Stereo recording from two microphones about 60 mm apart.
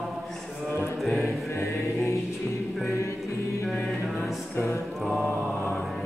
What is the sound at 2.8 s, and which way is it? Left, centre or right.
Music, left.